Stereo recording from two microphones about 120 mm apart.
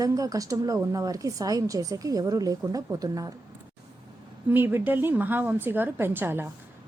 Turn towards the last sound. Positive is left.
turn(degrees=-20)  # may be behind; listen again after turning